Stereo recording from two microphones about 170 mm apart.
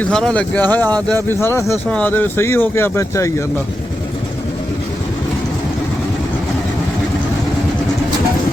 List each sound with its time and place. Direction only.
0.0 s speech: 5° left (ahead or behind)